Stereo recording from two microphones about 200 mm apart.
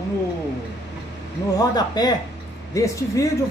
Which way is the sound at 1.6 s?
20° left (ahead or behind).